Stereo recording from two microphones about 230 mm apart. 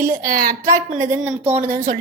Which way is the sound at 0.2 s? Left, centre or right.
Right.